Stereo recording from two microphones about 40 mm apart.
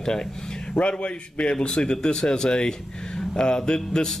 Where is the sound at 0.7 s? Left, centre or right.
Left.